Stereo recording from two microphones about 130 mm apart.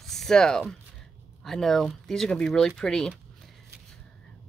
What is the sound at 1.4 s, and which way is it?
Speech, centre (ahead or behind).